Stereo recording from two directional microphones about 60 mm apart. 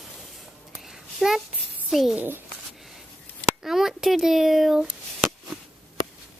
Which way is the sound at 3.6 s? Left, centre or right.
Centre.